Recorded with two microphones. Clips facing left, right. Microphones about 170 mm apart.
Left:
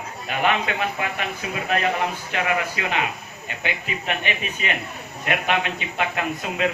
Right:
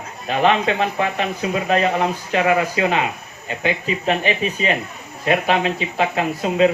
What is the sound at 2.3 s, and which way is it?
Speech, 30° right (ahead or behind).